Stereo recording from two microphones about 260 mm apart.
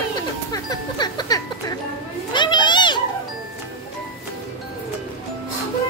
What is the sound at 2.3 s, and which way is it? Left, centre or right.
Children playing, centre.